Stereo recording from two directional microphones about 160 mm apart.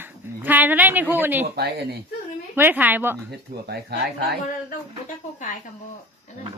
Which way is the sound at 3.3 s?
90° right.